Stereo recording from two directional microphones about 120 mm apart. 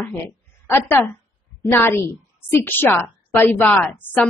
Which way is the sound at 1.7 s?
20° left (ahead or behind).